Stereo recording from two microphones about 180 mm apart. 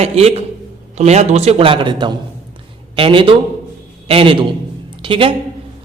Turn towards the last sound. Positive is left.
turn(degrees=-30)  # may be behind; listen again after turning